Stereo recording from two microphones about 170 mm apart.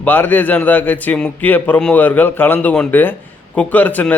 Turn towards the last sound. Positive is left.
turn(degrees=10)  # may be behind; listen again after turning